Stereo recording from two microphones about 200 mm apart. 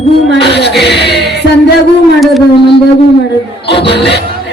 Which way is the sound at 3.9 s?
55° left (ahead or behind).